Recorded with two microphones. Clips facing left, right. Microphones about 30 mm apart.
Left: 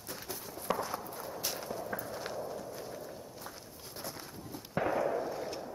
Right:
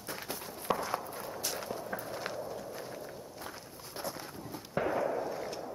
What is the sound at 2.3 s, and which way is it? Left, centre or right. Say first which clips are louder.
Clip-clop: even; centre.